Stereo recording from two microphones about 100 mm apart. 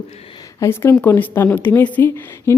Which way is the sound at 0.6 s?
25° left (ahead or behind).